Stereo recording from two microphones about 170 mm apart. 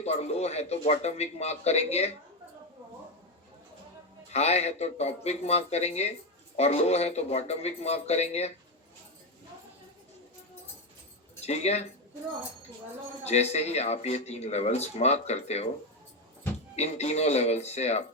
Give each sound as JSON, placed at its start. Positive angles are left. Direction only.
{"t": 0.0, "sound": "speech", "side_deg": 40}
{"t": 4.3, "sound": "speech", "side_deg": 40}
{"t": 11.3, "sound": "speech", "side_deg": 40}
{"t": 13.2, "sound": "speech", "side_deg": 40}
{"t": 16.7, "sound": "speech", "side_deg": 40}